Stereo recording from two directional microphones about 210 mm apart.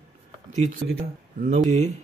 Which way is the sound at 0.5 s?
35° right (ahead or behind).